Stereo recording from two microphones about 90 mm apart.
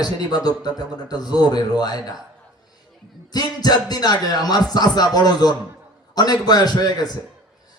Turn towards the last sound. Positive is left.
turn(degrees=45)  # may be behind; listen again after turning